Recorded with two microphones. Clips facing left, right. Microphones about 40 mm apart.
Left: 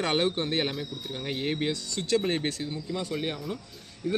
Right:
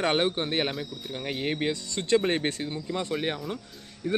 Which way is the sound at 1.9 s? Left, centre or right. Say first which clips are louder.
Right 3 dB; right.